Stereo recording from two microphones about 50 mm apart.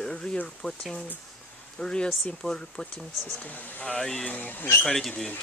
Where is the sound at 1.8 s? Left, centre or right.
Centre.